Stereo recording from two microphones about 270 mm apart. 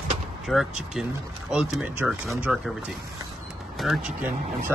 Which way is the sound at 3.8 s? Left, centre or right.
Centre.